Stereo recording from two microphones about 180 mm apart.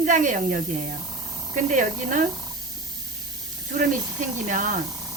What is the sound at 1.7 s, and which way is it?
Speech, 45° right (ahead or behind).